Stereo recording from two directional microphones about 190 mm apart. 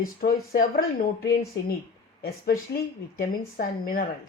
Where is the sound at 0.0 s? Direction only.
50° left (ahead or behind).